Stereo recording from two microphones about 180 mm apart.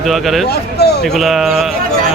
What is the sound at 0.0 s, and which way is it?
Speech, centre (ahead or behind).